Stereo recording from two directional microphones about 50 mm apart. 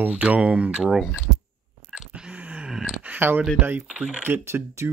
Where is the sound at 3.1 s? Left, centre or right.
Right.